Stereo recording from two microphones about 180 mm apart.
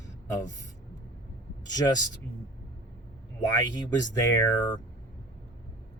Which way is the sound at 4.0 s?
20° left (ahead or behind).